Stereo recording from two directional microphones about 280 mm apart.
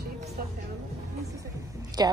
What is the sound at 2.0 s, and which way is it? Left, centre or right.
Speech, centre.